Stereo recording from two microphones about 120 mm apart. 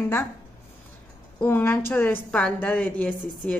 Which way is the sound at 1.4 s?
20° left (ahead or behind).